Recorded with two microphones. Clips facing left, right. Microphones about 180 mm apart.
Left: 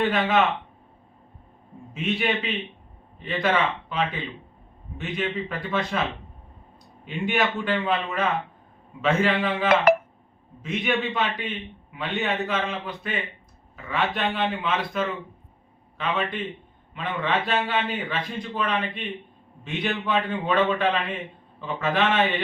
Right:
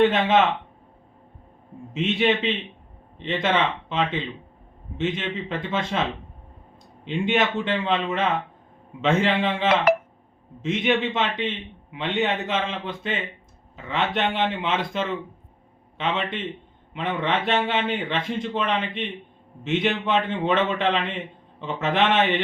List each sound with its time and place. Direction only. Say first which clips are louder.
0.0 s a man's voice: right 4 dB; 25° right (ahead or behind)
1.9 s a man's voice: right 4 dB; 25° right (ahead or behind)
7.0 s a man's voice: right 2 dB; 20° right (ahead or behind)